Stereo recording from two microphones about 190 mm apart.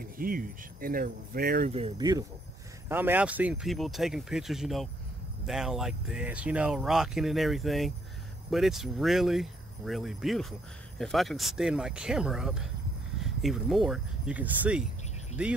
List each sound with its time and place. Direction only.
0.0 s speech: 50° right (ahead or behind)
1.7 s speech: 30° right (ahead or behind)
2.0 s speech: 20° right (ahead or behind)